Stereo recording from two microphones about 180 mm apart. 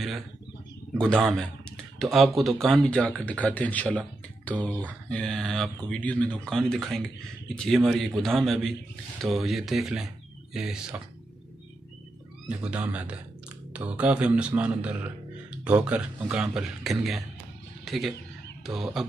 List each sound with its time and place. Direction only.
0.9 s speech: 5° left (ahead or behind)
12.4 s speech: 5° right (ahead or behind)